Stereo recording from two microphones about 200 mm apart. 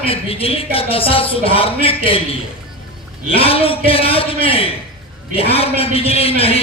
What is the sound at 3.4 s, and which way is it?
Speech, 30° left (ahead or behind).